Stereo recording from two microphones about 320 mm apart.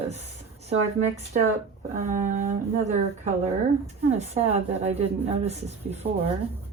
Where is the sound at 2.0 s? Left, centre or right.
Right.